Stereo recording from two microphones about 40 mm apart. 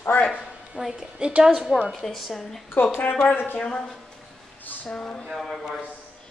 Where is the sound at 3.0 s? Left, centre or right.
Left.